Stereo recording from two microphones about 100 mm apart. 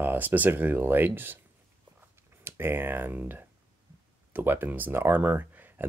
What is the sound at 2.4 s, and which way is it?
Speech, 25° right (ahead or behind).